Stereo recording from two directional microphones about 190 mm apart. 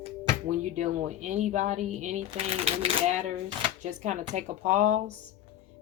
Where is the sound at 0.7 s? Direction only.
35° right (ahead or behind).